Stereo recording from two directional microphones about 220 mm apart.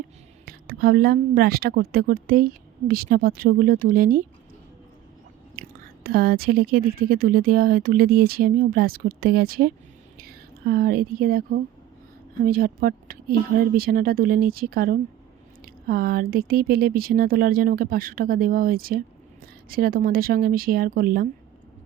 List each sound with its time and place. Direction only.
0.4 s a woman's voice: 40° right (ahead or behind)
5.5 s a woman's voice: 40° right (ahead or behind)